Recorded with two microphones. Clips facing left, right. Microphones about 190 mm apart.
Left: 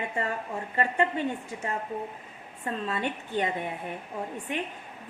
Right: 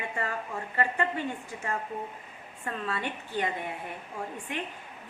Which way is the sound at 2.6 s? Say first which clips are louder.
Left 3 dB; 20° left (ahead or behind).